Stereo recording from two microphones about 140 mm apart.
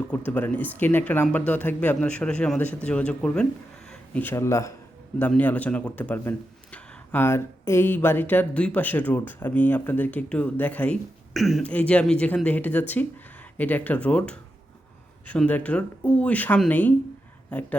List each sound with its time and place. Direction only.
0.1 s speech: 10° left (ahead or behind)
11.3 s speech: centre (ahead or behind)